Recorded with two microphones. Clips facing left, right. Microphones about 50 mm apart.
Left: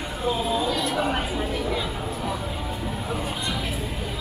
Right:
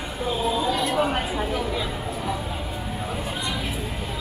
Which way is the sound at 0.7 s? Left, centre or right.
Right.